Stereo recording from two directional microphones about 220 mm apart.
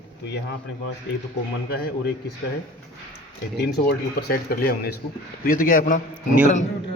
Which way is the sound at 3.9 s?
45° left (ahead or behind).